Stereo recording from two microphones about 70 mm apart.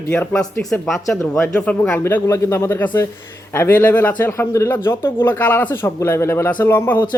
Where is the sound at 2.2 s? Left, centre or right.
Left.